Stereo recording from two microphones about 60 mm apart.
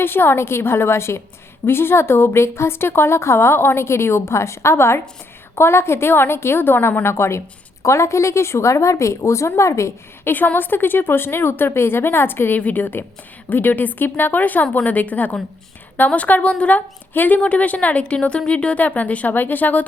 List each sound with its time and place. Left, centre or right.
0.0 s a woman's voice: left
10.2 s a woman's voice: left